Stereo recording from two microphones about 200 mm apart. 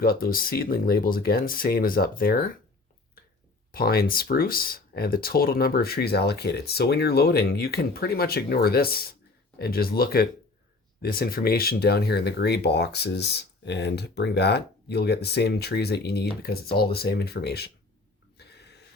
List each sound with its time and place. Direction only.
0.0 s speech: 50° left (ahead or behind)
3.7 s speech: 50° left (ahead or behind)
18.3 s a sound: 55° left (ahead or behind)